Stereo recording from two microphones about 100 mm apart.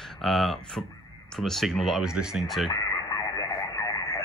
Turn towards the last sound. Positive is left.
turn(degrees=35)  # may be behind; listen again after turning